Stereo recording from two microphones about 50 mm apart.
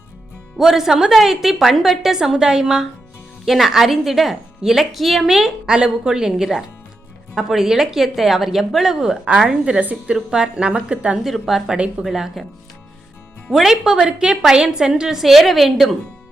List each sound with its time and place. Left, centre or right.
0.5 s a woman's voice: centre
3.4 s a woman's voice: centre; by 11.2 s right
11.2 s a woman's voice: centre
13.5 s a woman's voice: centre